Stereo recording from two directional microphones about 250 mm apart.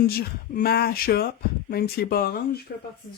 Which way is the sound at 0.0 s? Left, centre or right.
Left.